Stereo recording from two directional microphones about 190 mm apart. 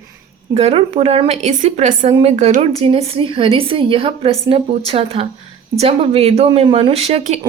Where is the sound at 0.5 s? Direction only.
30° right (ahead or behind).